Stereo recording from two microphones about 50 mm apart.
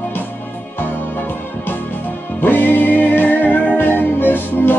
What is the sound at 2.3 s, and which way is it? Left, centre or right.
Music, left.